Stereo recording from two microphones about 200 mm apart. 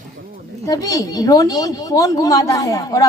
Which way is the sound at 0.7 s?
20° left (ahead or behind).